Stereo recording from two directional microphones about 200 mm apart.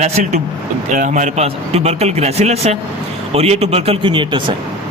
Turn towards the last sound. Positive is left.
turn(degrees=-25)  # may be behind; listen again after turning